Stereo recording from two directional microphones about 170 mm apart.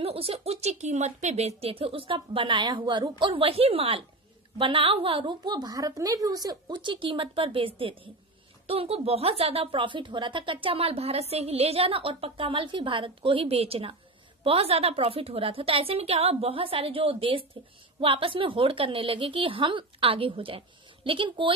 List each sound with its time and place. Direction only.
0.0 s a woman's voice: 35° right (ahead or behind)